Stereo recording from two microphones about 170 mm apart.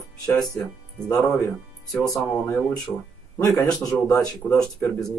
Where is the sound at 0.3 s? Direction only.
20° left (ahead or behind).